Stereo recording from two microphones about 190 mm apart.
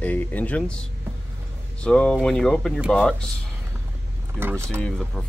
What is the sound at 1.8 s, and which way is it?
Speech, 5° left (ahead or behind).